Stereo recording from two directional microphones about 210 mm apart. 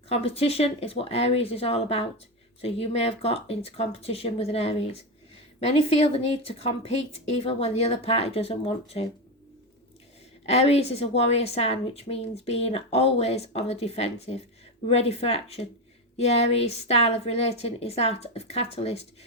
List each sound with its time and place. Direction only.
0.1 s a woman's voice: 30° left (ahead or behind)
10.4 s a woman's voice: 30° left (ahead or behind)